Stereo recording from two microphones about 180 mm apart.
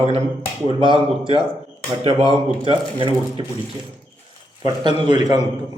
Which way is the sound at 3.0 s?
25° right (ahead or behind).